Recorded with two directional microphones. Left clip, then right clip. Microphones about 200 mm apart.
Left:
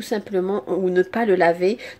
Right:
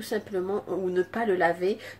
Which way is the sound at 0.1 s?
35° left (ahead or behind).